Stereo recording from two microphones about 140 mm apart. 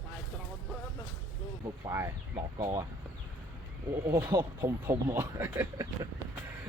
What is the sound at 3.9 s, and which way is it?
Speech, 15° right (ahead or behind).